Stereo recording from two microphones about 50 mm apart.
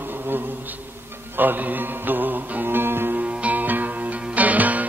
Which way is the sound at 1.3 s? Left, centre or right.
Right.